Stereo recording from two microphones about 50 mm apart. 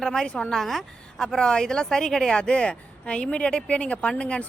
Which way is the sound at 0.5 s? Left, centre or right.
Centre.